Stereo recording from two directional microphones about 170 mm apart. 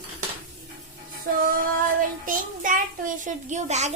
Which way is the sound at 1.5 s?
55° right (ahead or behind).